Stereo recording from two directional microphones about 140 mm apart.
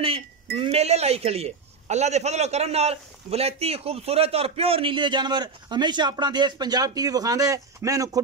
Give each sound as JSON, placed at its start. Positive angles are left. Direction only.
{"t": 0.0, "sound": "speech", "side_deg": -40}